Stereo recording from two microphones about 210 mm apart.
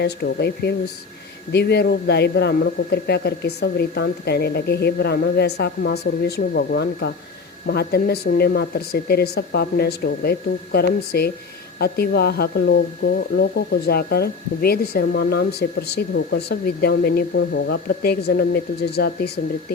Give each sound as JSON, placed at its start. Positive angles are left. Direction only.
{"t": 0.0, "sound": "speech", "side_deg": 50}